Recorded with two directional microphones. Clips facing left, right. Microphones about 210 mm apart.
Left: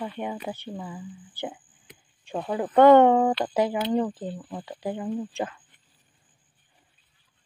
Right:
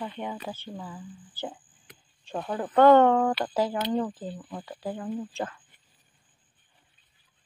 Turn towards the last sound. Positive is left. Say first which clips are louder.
# left 3 dB
turn(degrees=15)  # may be behind; listen again after turning